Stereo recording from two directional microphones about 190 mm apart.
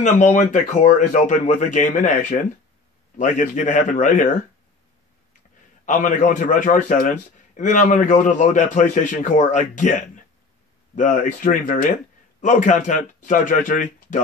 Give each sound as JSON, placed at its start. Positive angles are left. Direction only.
{"t": 0.0, "sound": "a man's voice", "side_deg": 40}
{"t": 5.9, "sound": "a man's voice", "side_deg": 45}
{"t": 11.4, "sound": "speech", "side_deg": 45}